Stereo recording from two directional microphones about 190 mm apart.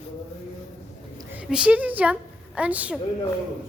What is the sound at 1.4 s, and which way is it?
A woman's voice, 5° right (ahead or behind).